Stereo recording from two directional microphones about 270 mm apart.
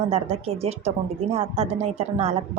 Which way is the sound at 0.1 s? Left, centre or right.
Right.